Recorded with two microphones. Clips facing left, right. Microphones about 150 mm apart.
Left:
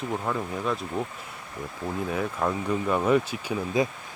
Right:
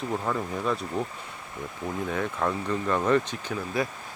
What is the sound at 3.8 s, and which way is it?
Speech, 20° left (ahead or behind).